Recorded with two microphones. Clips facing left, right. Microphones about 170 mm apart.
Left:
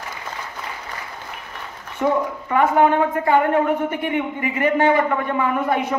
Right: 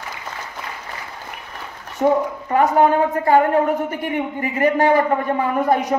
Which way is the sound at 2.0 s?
40° right (ahead or behind).